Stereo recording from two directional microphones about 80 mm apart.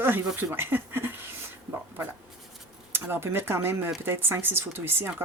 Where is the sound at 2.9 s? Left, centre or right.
Right.